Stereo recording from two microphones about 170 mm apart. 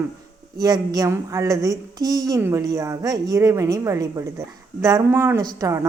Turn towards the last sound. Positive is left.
turn(degrees=-15)  # may be behind; listen again after turning